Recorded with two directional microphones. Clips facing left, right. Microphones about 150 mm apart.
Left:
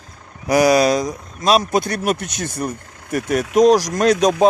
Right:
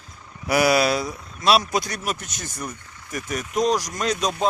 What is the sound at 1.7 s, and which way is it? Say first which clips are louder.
Speech: left 7 dB; 55° left (ahead or behind).